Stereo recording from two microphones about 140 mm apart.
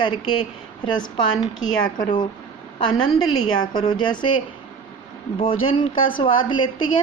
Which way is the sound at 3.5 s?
30° left (ahead or behind).